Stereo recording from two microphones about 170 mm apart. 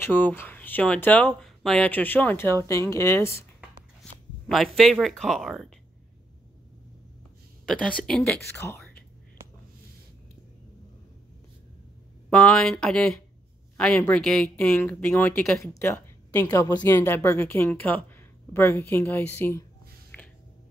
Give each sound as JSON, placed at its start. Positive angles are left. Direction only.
{"t": 0.0, "sound": "speech", "side_deg": 10}
{"t": 4.5, "sound": "speech", "side_deg": 0}
{"t": 7.6, "sound": "speech", "side_deg": 5}
{"t": 12.3, "sound": "speech", "side_deg": 5}
{"t": 20.1, "sound": "a sound", "side_deg": 10}